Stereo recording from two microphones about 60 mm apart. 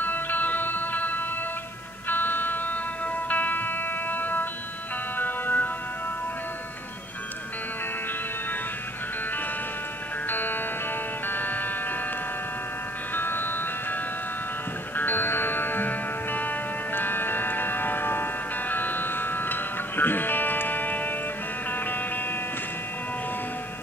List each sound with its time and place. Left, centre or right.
0.0 s music: left
10.2 s music: left
13.1 s music: left
15.0 s music: left